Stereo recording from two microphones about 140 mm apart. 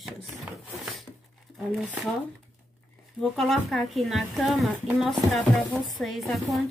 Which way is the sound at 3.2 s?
Centre (ahead or behind).